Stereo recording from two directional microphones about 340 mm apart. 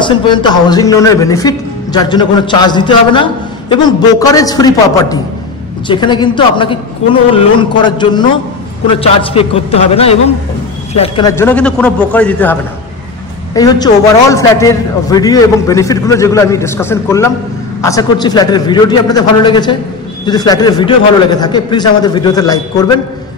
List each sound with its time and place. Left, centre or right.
0.0 s a man's voice: centre
13.6 s speech: centre